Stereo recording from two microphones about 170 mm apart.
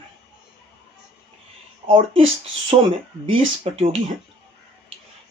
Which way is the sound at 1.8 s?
35° right (ahead or behind).